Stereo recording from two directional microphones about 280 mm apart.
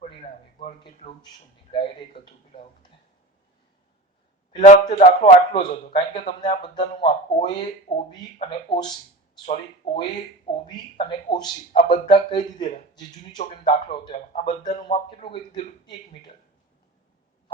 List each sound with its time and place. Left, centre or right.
0.0 s a sound: left
1.7 s speech: centre
4.6 s a man's voice: left